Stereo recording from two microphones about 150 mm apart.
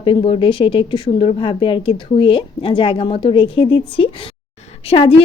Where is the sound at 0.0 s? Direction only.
35° left (ahead or behind).